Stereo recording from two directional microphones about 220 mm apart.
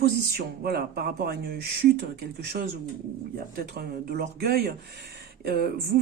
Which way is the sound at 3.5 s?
45° right (ahead or behind).